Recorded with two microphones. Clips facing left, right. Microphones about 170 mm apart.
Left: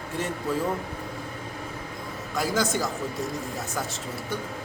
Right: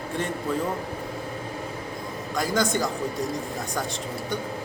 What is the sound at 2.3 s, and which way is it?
Speech, 5° left (ahead or behind).